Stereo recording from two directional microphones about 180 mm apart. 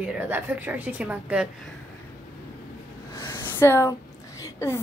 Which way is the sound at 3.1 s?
15° left (ahead or behind).